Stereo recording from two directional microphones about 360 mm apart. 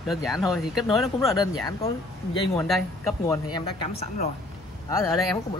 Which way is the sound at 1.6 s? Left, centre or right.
Centre.